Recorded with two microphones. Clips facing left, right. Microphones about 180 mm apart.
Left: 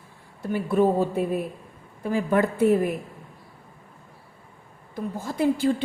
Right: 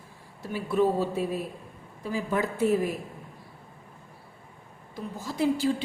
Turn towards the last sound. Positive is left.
turn(degrees=50)  # may be behind; listen again after turning